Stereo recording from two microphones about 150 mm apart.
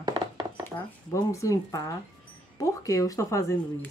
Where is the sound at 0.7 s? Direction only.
20° left (ahead or behind).